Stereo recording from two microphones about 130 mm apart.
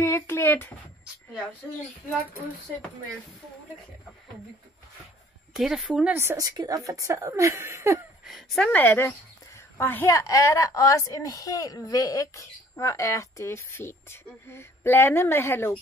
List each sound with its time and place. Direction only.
0.0 s a child's voice: 20° left (ahead or behind)
5.5 s a woman's voice: centre (ahead or behind)
6.1 s a woman's voice: 25° right (ahead or behind)
8.3 s speech: centre (ahead or behind)
8.6 s a woman's voice: 15° left (ahead or behind)